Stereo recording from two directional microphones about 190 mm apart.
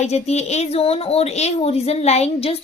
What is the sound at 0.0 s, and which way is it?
A woman's voice, 35° left (ahead or behind).